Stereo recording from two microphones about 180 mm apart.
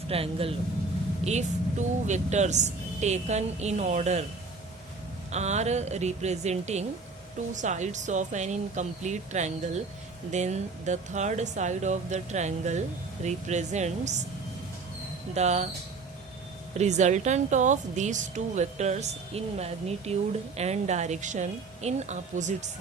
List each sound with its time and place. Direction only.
0.1 s a woman's voice: 30° right (ahead or behind)
5.3 s a woman's voice: 40° right (ahead or behind)
15.4 s a woman's voice: 40° right (ahead or behind)
16.7 s a woman's voice: 40° right (ahead or behind)